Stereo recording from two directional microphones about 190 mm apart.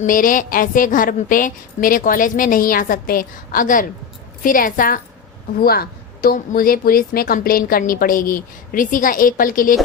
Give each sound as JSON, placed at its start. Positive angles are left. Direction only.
{"t": 0.0, "sound": "a woman's voice", "side_deg": 45}